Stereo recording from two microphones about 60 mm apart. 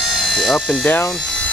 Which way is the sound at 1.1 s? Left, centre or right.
Centre.